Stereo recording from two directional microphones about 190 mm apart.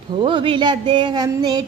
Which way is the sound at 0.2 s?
25° right (ahead or behind).